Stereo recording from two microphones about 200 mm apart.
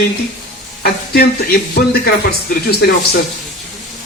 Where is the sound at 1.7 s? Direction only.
50° left (ahead or behind).